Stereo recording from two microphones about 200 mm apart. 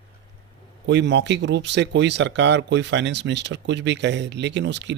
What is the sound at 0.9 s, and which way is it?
Speech, 60° right (ahead or behind).